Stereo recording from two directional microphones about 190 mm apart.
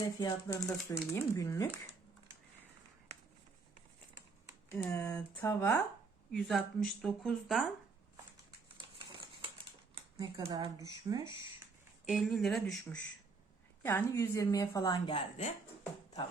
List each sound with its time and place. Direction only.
0.2 s a woman's voice: 20° left (ahead or behind)
4.9 s a woman's voice: 15° left (ahead or behind)
6.3 s speech: centre (ahead or behind)
9.9 s speech: 20° right (ahead or behind)
12.0 s speech: centre (ahead or behind)
13.8 s a woman's voice: 15° left (ahead or behind); by 15.5 s 35° left (ahead or behind)